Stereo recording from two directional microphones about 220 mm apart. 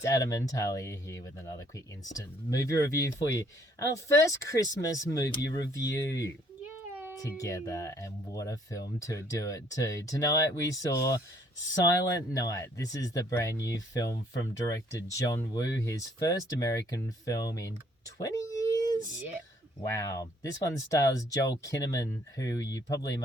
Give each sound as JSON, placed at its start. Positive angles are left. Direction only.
{"t": 0.0, "sound": "speech", "side_deg": 15}
{"t": 6.9, "sound": "cat", "side_deg": -10}
{"t": 7.2, "sound": "speech", "side_deg": 15}
{"t": 15.3, "sound": "speech", "side_deg": 15}
{"t": 18.2, "sound": "a sound", "side_deg": 15}
{"t": 20.0, "sound": "speech", "side_deg": 15}